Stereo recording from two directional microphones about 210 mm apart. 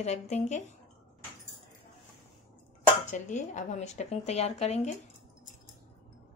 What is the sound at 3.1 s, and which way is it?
Speech, 35° left (ahead or behind).